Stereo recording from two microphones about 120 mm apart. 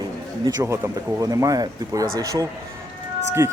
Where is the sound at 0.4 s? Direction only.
25° right (ahead or behind).